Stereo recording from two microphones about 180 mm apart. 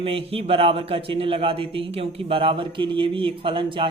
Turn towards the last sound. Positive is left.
turn(degrees=-25)  # may be behind; listen again after turning